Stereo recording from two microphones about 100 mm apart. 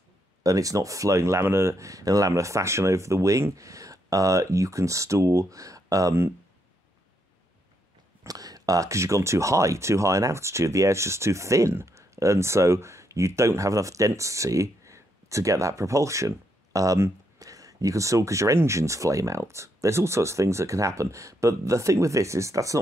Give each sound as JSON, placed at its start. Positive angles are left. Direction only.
{"t": 0.4, "sound": "speech", "side_deg": -35}
{"t": 8.3, "sound": "speech", "side_deg": -40}